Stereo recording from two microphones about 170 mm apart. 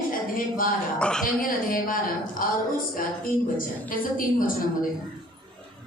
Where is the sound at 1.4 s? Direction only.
55° left (ahead or behind).